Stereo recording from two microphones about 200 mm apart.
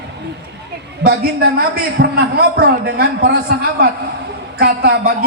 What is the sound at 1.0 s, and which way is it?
A woman's voice, 50° right (ahead or behind).